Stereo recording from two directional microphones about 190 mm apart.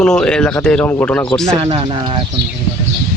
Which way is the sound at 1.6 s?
25° right (ahead or behind).